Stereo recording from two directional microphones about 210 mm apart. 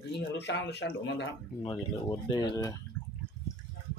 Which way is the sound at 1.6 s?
25° left (ahead or behind).